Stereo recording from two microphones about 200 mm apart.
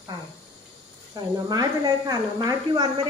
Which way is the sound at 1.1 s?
20° right (ahead or behind).